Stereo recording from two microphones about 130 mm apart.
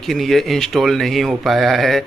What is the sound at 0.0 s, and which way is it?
A man's voice, centre (ahead or behind).